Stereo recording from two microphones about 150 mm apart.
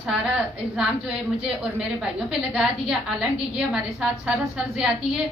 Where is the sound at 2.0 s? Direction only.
5° right (ahead or behind).